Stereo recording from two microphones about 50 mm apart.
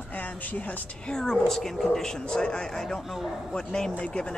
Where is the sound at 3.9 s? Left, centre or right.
Left.